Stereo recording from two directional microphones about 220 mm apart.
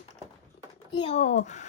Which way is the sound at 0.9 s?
25° left (ahead or behind).